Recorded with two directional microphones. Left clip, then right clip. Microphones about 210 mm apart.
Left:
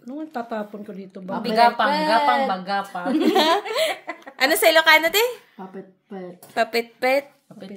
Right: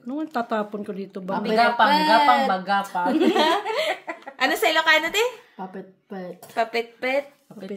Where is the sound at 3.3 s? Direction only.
55° left (ahead or behind).